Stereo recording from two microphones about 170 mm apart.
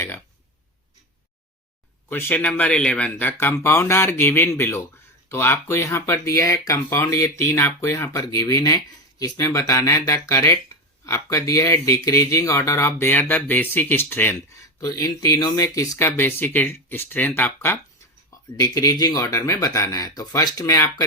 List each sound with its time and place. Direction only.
2.0 s speech: 10° left (ahead or behind)